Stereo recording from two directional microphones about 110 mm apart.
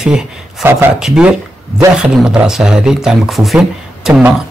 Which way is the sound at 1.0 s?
5° right (ahead or behind).